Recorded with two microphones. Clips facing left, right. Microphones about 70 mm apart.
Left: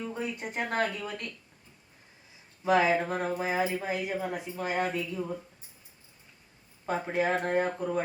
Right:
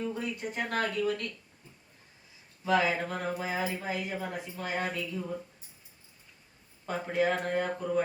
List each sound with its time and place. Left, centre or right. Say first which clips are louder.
0.1 s speech: even; left
2.6 s speech: left 3 dB; left
6.8 s speech: even; left